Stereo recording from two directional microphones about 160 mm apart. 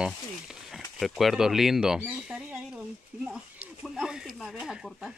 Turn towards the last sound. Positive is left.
turn(degrees=0)  # may be behind; listen again after turning